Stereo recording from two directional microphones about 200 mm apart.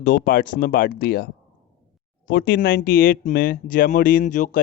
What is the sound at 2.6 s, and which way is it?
Speech, 50° left (ahead or behind).